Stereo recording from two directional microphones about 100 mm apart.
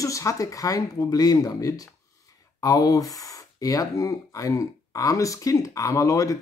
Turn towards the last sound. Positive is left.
turn(degrees=35)  # may be behind; listen again after turning